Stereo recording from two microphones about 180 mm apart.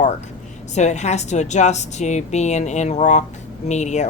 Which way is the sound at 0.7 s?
40° left (ahead or behind).